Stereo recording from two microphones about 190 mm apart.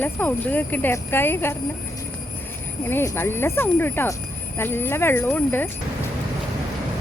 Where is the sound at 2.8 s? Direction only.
10° left (ahead or behind).